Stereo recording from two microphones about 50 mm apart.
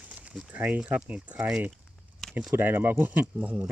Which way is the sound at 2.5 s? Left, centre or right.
Right.